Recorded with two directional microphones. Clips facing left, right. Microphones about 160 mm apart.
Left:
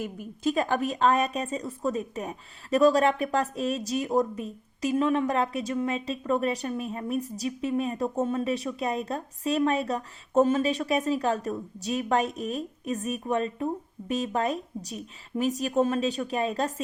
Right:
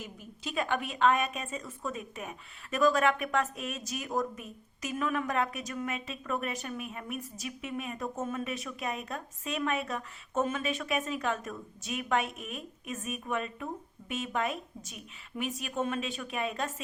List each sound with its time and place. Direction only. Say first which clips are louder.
0.0 s a woman's voice: left 13 dB; 45° left (ahead or behind)